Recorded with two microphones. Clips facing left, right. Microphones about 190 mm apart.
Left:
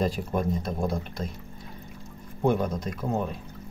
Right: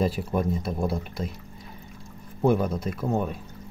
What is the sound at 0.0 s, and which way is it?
Speech, 5° right (ahead or behind).